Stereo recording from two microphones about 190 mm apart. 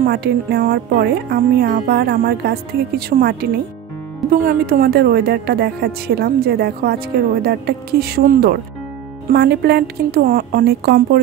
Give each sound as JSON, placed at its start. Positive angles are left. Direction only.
{"t": 0.0, "sound": "speech", "side_deg": -55}